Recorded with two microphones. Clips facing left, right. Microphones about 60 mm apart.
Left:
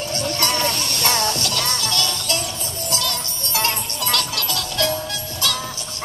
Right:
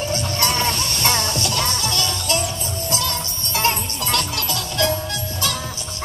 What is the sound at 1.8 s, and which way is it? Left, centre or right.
Music, centre.